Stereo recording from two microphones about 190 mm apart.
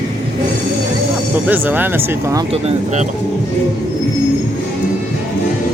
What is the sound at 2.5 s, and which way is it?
Speech, 30° right (ahead or behind).